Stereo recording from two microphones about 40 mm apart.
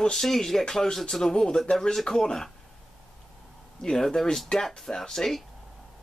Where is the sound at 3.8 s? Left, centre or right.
Centre.